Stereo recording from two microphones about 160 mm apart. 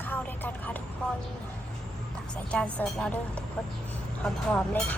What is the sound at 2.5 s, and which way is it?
Speech, 5° left (ahead or behind).